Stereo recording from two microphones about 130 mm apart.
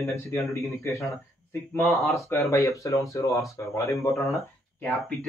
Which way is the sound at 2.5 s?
25° left (ahead or behind).